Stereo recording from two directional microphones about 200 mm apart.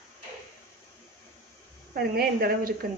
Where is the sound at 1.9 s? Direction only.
50° right (ahead or behind).